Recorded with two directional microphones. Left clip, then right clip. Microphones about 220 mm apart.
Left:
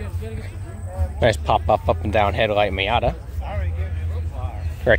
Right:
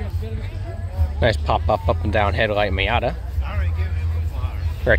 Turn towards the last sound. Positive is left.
turn(degrees=5)  # may be behind; listen again after turning